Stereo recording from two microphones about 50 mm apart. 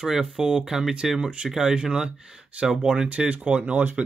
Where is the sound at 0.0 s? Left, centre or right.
Centre.